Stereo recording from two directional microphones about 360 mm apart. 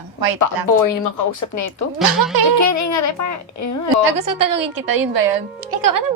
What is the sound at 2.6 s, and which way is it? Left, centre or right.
Speech, left.